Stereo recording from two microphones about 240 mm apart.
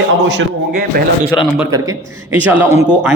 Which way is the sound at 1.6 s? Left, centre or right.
Centre.